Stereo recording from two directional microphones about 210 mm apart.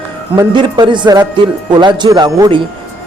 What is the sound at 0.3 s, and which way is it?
Speech, 20° right (ahead or behind).